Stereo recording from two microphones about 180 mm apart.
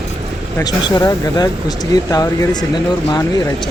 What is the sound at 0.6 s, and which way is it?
Speech, 15° left (ahead or behind).